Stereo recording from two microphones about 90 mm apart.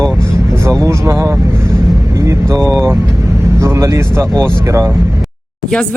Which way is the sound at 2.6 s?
30° right (ahead or behind).